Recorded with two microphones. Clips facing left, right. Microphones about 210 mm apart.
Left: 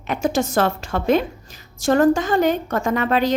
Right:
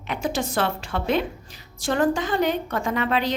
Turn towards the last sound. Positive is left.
turn(degrees=45)  # may be behind; listen again after turning